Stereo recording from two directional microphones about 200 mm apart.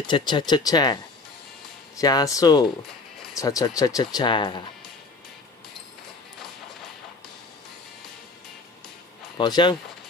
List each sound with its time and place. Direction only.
0.0 s speech: 20° left (ahead or behind)
2.0 s speech: 20° left (ahead or behind)
9.4 s speech: 20° left (ahead or behind)